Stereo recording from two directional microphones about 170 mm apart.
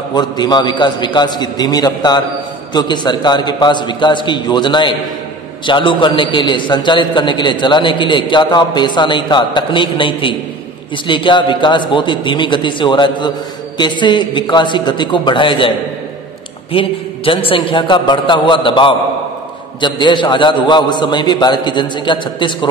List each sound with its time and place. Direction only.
0.1 s a man's voice: 25° left (ahead or behind)
16.7 s a man's voice: 30° left (ahead or behind)